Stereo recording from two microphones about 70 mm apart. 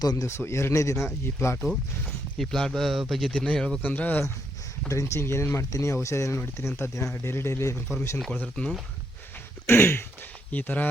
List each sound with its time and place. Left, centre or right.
0.0 s a man's voice: left
0.3 s speech: left
2.4 s speech: centre
3.3 s speech: centre
3.8 s speech: left
4.9 s speech: left
8.3 s speech: centre
9.6 s speech: left
10.5 s speech: left